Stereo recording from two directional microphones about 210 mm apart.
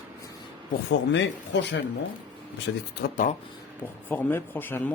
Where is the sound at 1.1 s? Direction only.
60° left (ahead or behind).